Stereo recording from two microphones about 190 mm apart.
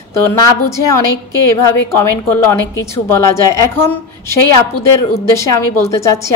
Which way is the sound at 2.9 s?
15° left (ahead or behind).